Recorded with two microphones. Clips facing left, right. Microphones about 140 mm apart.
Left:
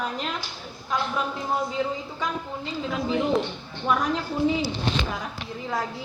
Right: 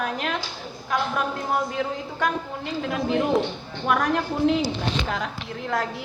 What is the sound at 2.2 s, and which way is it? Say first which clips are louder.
A woman's voice: right 4 dB; 70° right (ahead or behind).